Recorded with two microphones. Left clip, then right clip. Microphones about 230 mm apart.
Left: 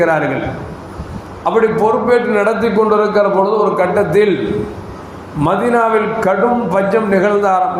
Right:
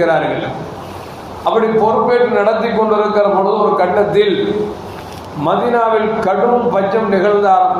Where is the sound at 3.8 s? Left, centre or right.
Left.